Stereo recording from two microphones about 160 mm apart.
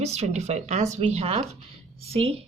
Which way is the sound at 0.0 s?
45° right (ahead or behind).